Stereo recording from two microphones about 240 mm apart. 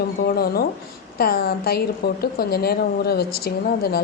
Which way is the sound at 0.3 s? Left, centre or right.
Left.